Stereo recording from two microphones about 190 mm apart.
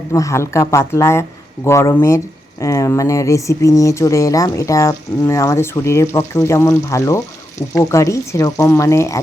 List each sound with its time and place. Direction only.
0.1 s speech: 15° left (ahead or behind)